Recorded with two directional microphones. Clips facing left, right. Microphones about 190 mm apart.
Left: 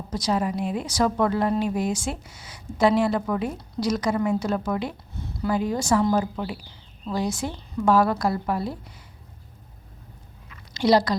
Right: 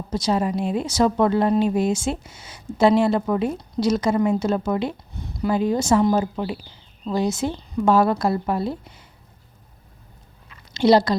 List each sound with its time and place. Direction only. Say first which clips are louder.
0.1 s a woman's voice: right 3 dB; 25° right (ahead or behind)
10.5 s chewing: right 4 dB; 25° right (ahead or behind)